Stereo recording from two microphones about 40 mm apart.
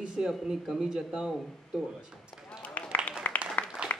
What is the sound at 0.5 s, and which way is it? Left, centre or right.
Speech, centre.